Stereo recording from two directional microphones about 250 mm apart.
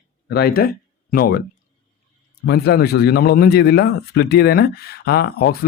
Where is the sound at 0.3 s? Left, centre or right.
Left.